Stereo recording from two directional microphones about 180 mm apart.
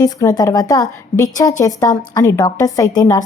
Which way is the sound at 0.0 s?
20° left (ahead or behind).